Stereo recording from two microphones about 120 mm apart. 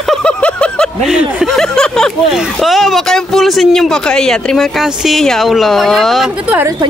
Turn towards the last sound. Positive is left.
turn(degrees=0)  # may be behind; listen again after turning